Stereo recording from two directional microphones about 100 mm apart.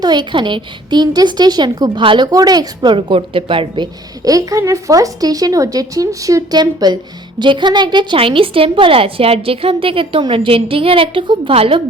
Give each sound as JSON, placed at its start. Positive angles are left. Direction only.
{"t": 0.0, "sound": "speech", "side_deg": -50}
{"t": 4.2, "sound": "speech", "side_deg": -35}
{"t": 11.5, "sound": "a woman's voice", "side_deg": -70}